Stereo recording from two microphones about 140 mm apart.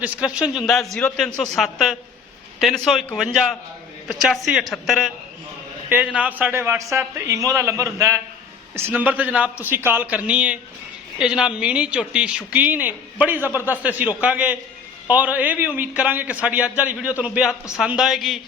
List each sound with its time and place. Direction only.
0.0 s a man's voice: 10° right (ahead or behind)
9.0 s a man's voice: 10° right (ahead or behind)